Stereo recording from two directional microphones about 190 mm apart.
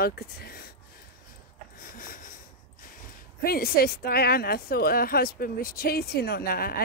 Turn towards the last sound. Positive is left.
turn(degrees=50)  # may be behind; listen again after turning